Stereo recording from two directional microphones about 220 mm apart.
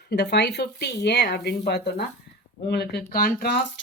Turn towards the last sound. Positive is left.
turn(degrees=45)  # may be behind; listen again after turning